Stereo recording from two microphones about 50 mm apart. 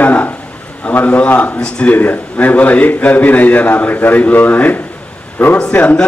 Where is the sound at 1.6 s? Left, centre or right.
Centre.